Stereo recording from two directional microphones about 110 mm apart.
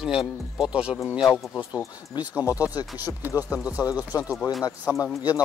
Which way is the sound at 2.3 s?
15° right (ahead or behind).